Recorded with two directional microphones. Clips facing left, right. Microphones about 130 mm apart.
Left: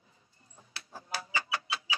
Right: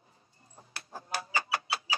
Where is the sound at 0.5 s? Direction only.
45° right (ahead or behind).